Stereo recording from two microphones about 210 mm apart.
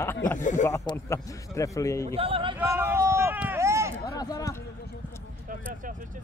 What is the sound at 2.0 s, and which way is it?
Speech, 25° right (ahead or behind).